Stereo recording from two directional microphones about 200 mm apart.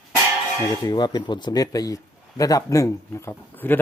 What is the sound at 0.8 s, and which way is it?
Speech, 20° left (ahead or behind).